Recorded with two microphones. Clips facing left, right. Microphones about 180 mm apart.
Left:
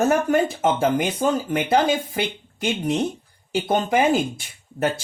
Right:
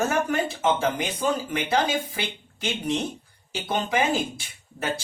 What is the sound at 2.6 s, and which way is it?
Speech, 50° left (ahead or behind).